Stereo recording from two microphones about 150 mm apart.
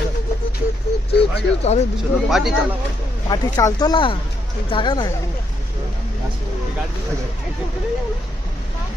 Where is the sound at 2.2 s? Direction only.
Centre (ahead or behind).